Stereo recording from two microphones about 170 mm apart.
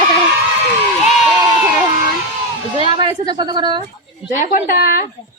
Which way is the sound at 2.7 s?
30° right (ahead or behind).